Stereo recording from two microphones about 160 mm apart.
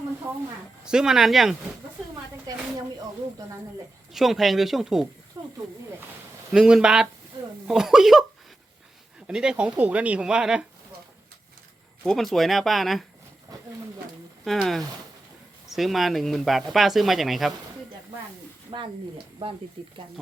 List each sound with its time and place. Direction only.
0.9 s speech: 5° right (ahead or behind)
2.5 s speech: 25° right (ahead or behind)
4.1 s speech: centre (ahead or behind)
5.4 s snake: 20° right (ahead or behind)
6.5 s speech: 5° right (ahead or behind)
9.2 s speech: 5° right (ahead or behind)
12.0 s speech: centre (ahead or behind)
13.5 s wild animals: 25° right (ahead or behind)
14.4 s speech: centre (ahead or behind)
18.7 s speech: 40° right (ahead or behind)